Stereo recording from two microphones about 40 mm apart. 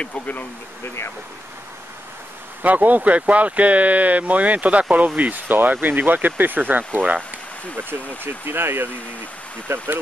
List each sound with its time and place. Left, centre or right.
0.0 s speech: left
0.8 s speech: left
2.6 s speech: right
6.8 s speech: right
7.7 s speech: right
9.7 s speech: right